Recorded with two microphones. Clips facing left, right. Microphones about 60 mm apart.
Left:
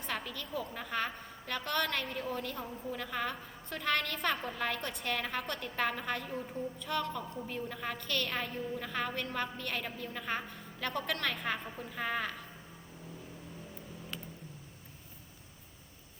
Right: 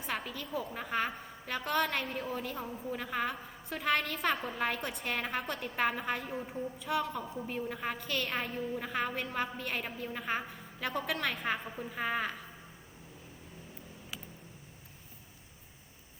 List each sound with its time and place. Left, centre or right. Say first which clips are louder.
0.0 s a woman's voice: right 1 dB; centre